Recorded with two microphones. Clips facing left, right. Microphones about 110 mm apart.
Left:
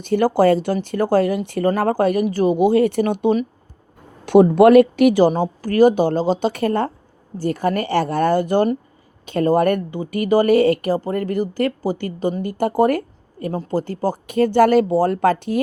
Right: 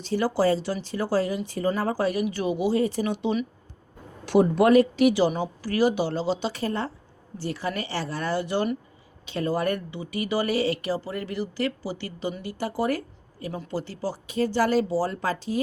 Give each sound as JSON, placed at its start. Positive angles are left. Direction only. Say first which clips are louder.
{"t": 0.0, "sound": "speech", "louder": "left 8 dB", "side_deg": 55}